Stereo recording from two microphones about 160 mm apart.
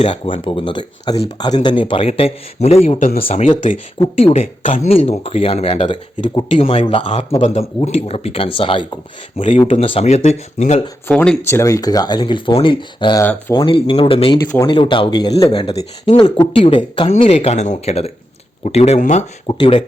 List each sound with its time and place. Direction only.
0.0 s speech: 35° left (ahead or behind)
9.4 s speech: 40° left (ahead or behind)
11.1 s speech: 5° left (ahead or behind)
11.4 s speech: 15° left (ahead or behind); by 14.3 s 35° left (ahead or behind)
14.5 s speech: 20° left (ahead or behind)
14.8 s speech: 30° left (ahead or behind)
19.5 s speech: 30° left (ahead or behind)